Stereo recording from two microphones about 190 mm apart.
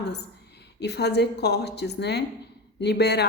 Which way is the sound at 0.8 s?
60° left (ahead or behind).